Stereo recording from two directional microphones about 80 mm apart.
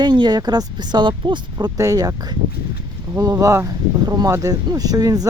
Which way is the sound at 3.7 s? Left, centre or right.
Right.